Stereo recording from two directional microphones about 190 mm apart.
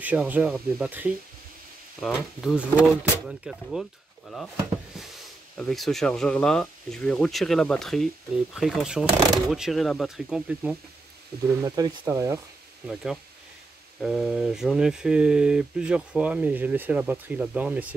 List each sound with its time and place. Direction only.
0.0 s speech: 10° right (ahead or behind)
5.6 s speech: centre (ahead or behind)
11.6 s speech: 20° right (ahead or behind)
12.8 s speech: centre (ahead or behind)